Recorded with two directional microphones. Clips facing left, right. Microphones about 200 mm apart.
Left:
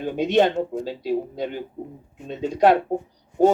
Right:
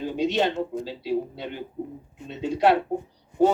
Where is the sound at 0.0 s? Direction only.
55° left (ahead or behind).